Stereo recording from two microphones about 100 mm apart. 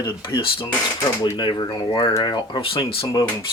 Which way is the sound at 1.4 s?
50° left (ahead or behind).